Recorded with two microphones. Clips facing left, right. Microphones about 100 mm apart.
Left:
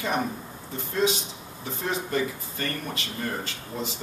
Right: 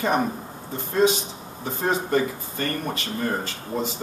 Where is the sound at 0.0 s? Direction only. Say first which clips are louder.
Right 5 dB; 40° right (ahead or behind).